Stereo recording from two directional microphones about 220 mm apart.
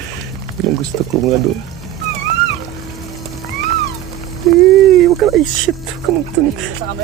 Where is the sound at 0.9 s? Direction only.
50° left (ahead or behind).